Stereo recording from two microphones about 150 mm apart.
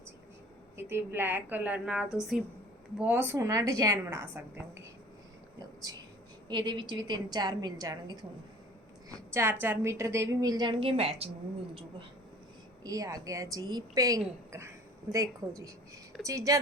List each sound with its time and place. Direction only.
0.8 s a woman's voice: 15° right (ahead or behind)
3.3 s a woman's voice: 20° right (ahead or behind)
5.5 s a sound: 25° right (ahead or behind)
6.5 s a woman's voice: 30° right (ahead or behind)
9.3 s a woman's voice: 15° right (ahead or behind); by 12.0 s 35° right (ahead or behind)
12.8 s a woman's voice: 20° right (ahead or behind)